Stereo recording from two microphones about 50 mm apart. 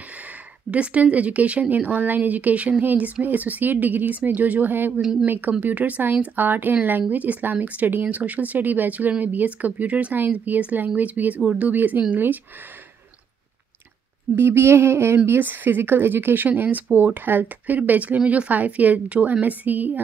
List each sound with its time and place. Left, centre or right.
0.7 s speech: right
14.3 s a sound: right
15.2 s speech: right
16.4 s speech: right